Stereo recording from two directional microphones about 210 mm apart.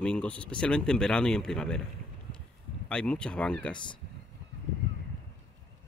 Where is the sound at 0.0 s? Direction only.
5° left (ahead or behind).